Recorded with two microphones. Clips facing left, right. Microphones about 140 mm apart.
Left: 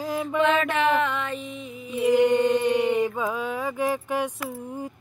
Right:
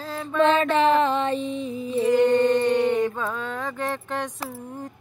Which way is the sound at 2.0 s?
10° left (ahead or behind).